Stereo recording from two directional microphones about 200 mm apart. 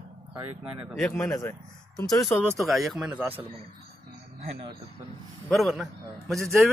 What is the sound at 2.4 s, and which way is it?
Speech, 5° right (ahead or behind).